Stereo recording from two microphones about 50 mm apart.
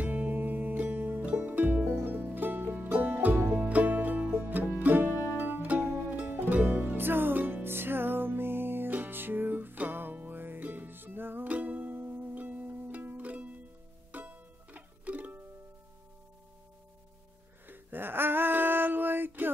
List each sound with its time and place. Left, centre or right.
0.0 s music: right
1.2 s music: right
1.9 s music: right
3.3 s music: right
3.6 s music: right
11.4 s music: right
17.6 s music: right